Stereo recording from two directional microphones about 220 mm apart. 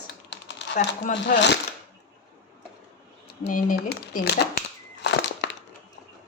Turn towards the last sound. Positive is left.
turn(degrees=55)  # may be behind; listen again after turning